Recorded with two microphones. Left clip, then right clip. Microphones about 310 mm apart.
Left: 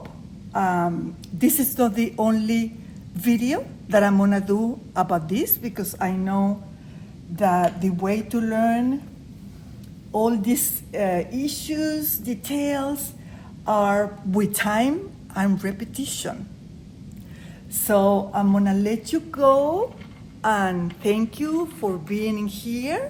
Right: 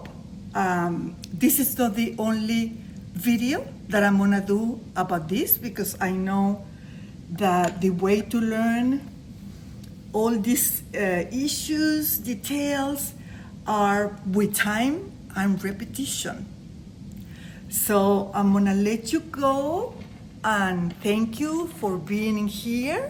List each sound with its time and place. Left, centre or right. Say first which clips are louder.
0.5 s a woman's voice: left 2 dB; centre
10.2 s a woman's voice: left 2 dB; centre
17.8 s a woman's voice: left 3 dB; centre